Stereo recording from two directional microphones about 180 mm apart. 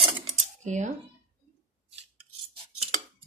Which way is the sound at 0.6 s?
40° right (ahead or behind).